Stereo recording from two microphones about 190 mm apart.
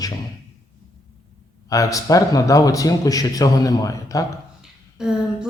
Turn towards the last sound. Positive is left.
turn(degrees=-5)  # may be behind; listen again after turning